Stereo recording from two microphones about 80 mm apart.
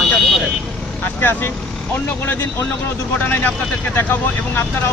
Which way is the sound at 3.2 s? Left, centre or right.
Left.